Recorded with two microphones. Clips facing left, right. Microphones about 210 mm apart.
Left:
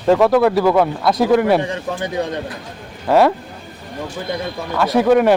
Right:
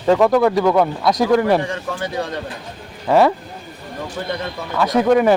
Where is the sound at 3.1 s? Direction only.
Centre (ahead or behind).